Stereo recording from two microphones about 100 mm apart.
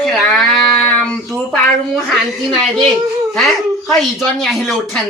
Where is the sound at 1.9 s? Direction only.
Centre (ahead or behind).